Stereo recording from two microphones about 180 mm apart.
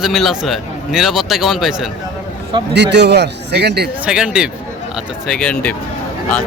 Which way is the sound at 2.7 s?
70° right (ahead or behind).